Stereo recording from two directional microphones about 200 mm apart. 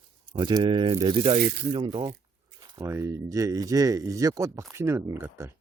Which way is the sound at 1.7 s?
25° right (ahead or behind).